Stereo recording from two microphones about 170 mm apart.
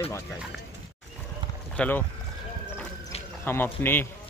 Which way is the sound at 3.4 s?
15° left (ahead or behind).